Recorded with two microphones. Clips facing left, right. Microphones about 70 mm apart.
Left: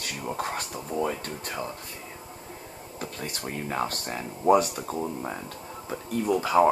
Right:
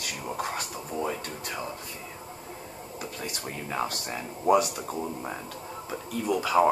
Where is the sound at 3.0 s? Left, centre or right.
Left.